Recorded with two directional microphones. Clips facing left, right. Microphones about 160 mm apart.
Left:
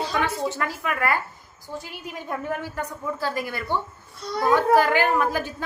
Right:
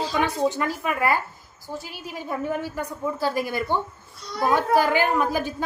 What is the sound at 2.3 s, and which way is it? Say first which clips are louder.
Speech: right 2 dB; 10° right (ahead or behind).